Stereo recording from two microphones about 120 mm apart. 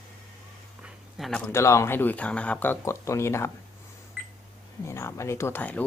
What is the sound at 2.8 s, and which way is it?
Speech, 25° left (ahead or behind).